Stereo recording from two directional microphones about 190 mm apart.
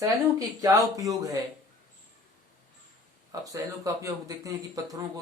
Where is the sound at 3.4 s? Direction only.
20° right (ahead or behind).